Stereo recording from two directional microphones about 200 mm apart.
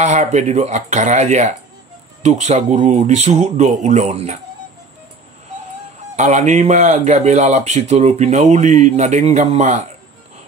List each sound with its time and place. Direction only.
0.0 s speech: 35° right (ahead or behind)
6.1 s speech: 35° right (ahead or behind)